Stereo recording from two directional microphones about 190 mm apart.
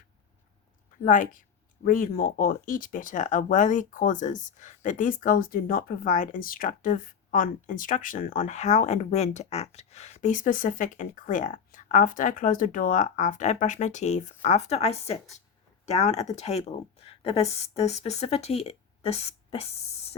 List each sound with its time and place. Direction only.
1.0 s a woman's voice: 45° left (ahead or behind)